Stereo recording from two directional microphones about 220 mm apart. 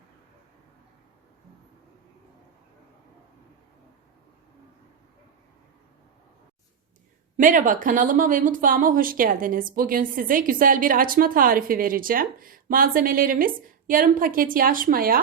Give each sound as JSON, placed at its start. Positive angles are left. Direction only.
{"t": 7.3, "sound": "speech", "side_deg": -35}